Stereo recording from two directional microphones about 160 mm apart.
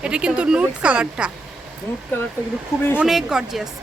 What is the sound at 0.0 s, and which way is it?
Speech, 5° right (ahead or behind).